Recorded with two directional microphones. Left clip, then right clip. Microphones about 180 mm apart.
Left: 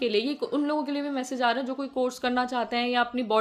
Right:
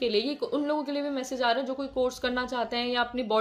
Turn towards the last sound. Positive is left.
turn(degrees=25)  # may be behind; listen again after turning